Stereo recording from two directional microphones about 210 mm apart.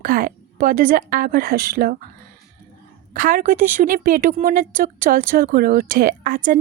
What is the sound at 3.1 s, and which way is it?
A woman's voice, 40° right (ahead or behind).